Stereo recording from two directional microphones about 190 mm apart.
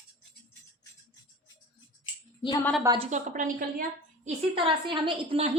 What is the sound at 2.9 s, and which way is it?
Speech, 35° right (ahead or behind).